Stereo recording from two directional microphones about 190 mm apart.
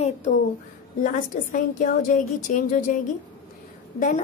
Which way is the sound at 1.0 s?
45° left (ahead or behind).